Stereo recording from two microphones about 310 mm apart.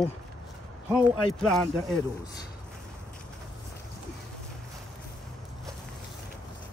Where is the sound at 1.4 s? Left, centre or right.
Centre.